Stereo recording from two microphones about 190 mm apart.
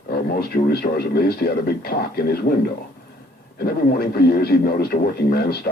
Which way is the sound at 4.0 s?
55° left (ahead or behind).